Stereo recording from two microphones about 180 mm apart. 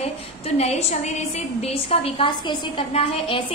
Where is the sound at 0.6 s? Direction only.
35° left (ahead or behind).